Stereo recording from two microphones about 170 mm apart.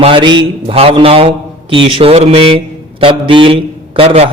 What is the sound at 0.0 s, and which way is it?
A man's voice, 30° right (ahead or behind).